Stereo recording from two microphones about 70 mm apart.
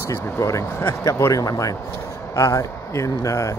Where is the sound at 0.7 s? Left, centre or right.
Left.